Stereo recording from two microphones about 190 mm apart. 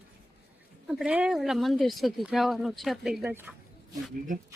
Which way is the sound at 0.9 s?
5° right (ahead or behind).